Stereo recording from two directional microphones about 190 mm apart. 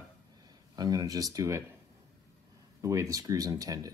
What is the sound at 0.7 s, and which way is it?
Speech, 20° right (ahead or behind).